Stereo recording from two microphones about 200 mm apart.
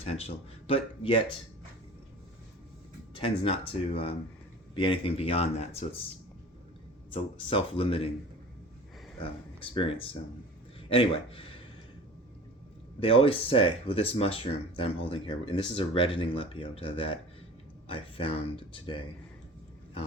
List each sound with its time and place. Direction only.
0.0 s speech: 30° left (ahead or behind)
3.2 s speech: 25° left (ahead or behind)
7.1 s speech: 25° left (ahead or behind)
9.1 s speech: 25° left (ahead or behind)
13.0 s speech: 30° left (ahead or behind)